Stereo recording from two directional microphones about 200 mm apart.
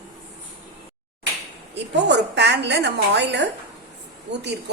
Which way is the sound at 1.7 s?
60° right (ahead or behind).